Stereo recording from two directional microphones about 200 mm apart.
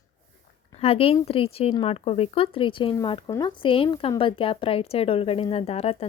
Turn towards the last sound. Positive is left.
turn(degrees=30)  # may be behind; listen again after turning